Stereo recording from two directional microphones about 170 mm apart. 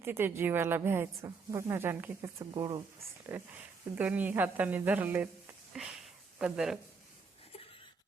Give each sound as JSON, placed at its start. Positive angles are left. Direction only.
{"t": 0.0, "sound": "speech", "side_deg": -15}
{"t": 2.4, "sound": "speech", "side_deg": -25}
{"t": 3.2, "sound": "a woman's voice", "side_deg": -10}